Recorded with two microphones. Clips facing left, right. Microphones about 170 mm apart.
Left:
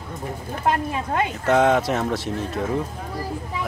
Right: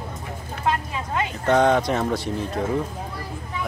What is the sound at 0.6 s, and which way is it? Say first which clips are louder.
Speech: left 2 dB; 50° left (ahead or behind).